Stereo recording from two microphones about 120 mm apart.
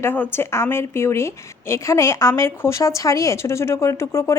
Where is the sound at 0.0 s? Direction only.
20° left (ahead or behind).